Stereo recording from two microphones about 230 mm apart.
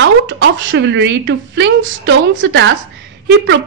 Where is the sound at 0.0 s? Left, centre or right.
Right.